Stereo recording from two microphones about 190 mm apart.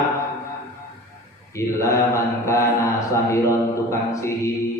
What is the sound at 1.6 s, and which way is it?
A man's voice, 15° left (ahead or behind).